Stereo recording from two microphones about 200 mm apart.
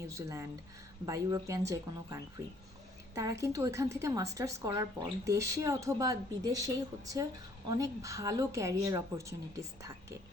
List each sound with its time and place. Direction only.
0.1 s a woman's voice: 15° right (ahead or behind)